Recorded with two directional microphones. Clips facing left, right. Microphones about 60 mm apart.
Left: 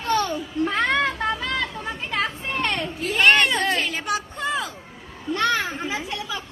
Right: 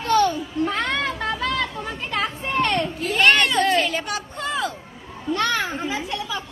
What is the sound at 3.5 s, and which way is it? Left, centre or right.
Chatter, centre.